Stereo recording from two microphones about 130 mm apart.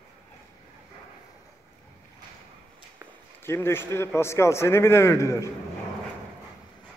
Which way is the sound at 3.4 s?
20° left (ahead or behind).